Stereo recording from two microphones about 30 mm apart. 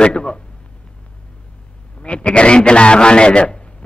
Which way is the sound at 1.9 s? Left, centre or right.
Left.